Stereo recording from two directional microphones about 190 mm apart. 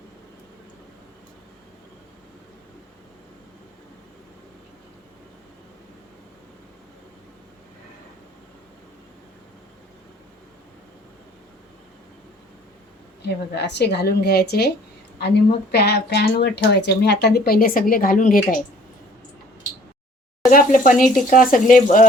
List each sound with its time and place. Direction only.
13.2 s speech: 60° left (ahead or behind); by 18.6 s 45° left (ahead or behind)
20.5 s speech: 45° left (ahead or behind)